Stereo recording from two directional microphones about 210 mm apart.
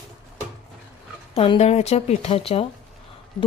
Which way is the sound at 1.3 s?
25° left (ahead or behind).